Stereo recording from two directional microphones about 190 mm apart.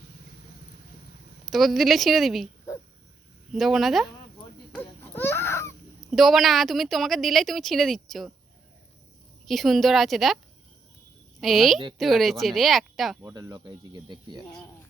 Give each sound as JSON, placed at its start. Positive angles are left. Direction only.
{"t": 1.5, "sound": "a woman's voice", "side_deg": 0}
{"t": 3.5, "sound": "a woman's voice", "side_deg": 0}
{"t": 4.7, "sound": "baby cry", "side_deg": 10}
{"t": 6.1, "sound": "a woman's voice", "side_deg": 0}
{"t": 9.5, "sound": "a woman's voice", "side_deg": 0}
{"t": 11.3, "sound": "a woman's voice", "side_deg": 0}
{"t": 13.2, "sound": "speech", "side_deg": -20}